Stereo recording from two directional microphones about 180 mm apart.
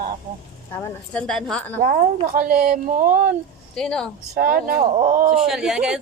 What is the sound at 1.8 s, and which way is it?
Speech, 50° right (ahead or behind).